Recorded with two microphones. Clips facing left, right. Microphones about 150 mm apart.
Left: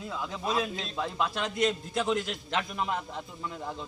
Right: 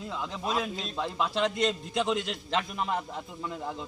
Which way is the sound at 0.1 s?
Centre (ahead or behind).